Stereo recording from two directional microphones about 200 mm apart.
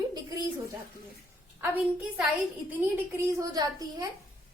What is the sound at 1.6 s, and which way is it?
A woman's voice, 5° right (ahead or behind).